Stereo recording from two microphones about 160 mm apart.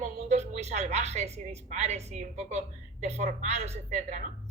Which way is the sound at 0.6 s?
45° right (ahead or behind).